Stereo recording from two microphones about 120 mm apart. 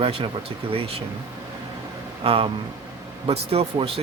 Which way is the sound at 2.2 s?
50° right (ahead or behind).